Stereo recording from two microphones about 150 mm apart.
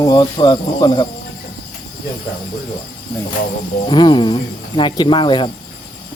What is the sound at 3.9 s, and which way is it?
Speech, 30° left (ahead or behind).